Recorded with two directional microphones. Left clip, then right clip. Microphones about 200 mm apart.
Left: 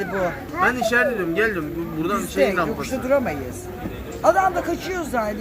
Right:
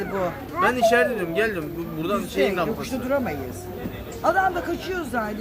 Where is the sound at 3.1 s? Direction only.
10° left (ahead or behind).